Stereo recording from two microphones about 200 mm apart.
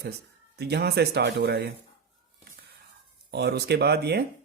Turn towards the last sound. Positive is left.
turn(degrees=-55)  # may be behind; listen again after turning